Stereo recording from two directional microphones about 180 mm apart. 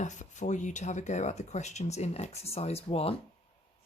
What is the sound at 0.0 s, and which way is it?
Speech, 40° left (ahead or behind).